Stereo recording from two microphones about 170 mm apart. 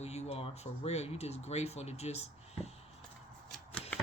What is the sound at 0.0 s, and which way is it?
Speech, 40° left (ahead or behind).